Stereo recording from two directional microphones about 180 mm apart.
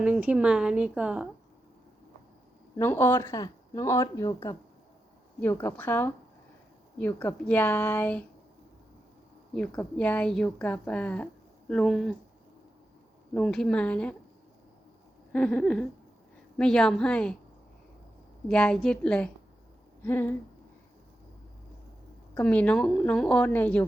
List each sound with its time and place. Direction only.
0.0 s a woman's voice: 10° right (ahead or behind)
2.7 s speech: 10° left (ahead or behind)
9.6 s a woman's voice: 5° left (ahead or behind)
13.3 s a woman's voice: centre (ahead or behind)
15.3 s a woman's voice: 5° left (ahead or behind)
18.4 s a woman's voice: 5° left (ahead or behind)
22.4 s a woman's voice: 5° left (ahead or behind)